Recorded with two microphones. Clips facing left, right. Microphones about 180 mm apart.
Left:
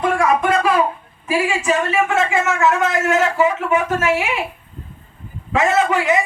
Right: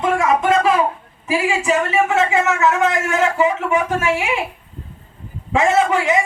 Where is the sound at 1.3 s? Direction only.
20° right (ahead or behind).